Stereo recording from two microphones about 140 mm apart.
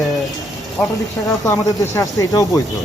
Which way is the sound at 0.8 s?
5° left (ahead or behind).